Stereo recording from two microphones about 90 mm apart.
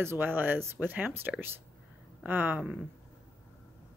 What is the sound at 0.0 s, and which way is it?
Speech, 25° right (ahead or behind).